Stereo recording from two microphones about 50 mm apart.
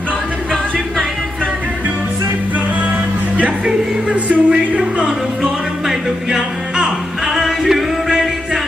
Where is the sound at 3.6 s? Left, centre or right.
Right.